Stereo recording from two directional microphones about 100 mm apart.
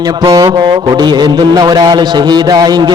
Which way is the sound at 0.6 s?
45° right (ahead or behind).